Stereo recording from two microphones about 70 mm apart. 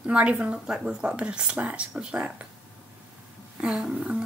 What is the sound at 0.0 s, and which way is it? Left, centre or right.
Speech, centre.